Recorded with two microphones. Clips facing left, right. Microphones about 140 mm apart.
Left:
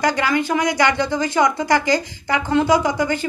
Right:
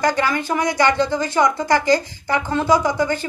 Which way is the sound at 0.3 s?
15° left (ahead or behind).